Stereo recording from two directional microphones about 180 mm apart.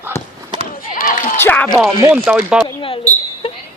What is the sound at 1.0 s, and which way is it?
Speech, 45° left (ahead or behind).